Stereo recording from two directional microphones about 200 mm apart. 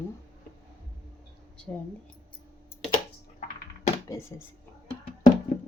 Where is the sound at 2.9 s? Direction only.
40° left (ahead or behind).